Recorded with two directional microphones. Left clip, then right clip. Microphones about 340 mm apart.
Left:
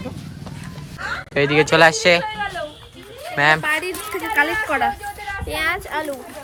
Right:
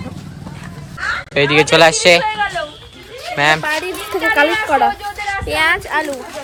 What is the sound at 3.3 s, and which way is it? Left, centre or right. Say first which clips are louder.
Speech: right 2 dB; centre.